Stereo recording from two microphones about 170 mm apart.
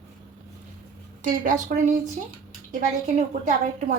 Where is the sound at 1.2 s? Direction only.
50° right (ahead or behind).